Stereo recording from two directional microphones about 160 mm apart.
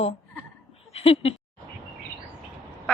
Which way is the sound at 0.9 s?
40° left (ahead or behind).